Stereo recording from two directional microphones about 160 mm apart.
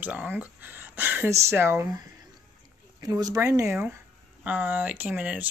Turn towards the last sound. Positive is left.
turn(degrees=-10)  # may be behind; listen again after turning